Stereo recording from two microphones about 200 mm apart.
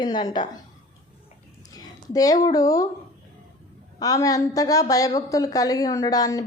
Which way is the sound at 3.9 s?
20° left (ahead or behind).